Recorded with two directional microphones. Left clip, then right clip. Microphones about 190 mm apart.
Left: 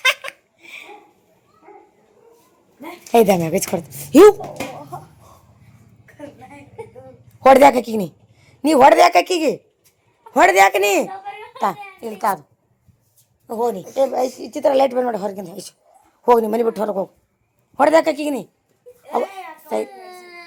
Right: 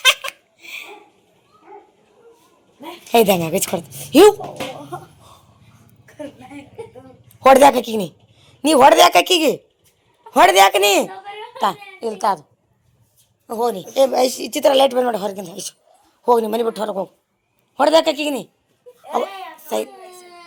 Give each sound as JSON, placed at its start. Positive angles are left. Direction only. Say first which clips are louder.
{"t": 0.0, "sound": "a sound", "louder": "right 3 dB", "side_deg": 10}
{"t": 3.1, "sound": "a woman's voice", "louder": "even", "side_deg": 15}
{"t": 7.4, "sound": "a woman's voice", "louder": "even", "side_deg": 15}
{"t": 13.5, "sound": "a woman's voice", "louder": "right 1 dB", "side_deg": 10}
{"t": 13.9, "sound": "a woman's voice", "louder": "right 6 dB", "side_deg": -10}
{"t": 14.7, "sound": "a woman's voice", "louder": "right 2 dB", "side_deg": 10}
{"t": 17.7, "sound": "a woman's voice", "louder": "even", "side_deg": 10}
{"t": 19.1, "sound": "a sound", "louder": "even", "side_deg": 10}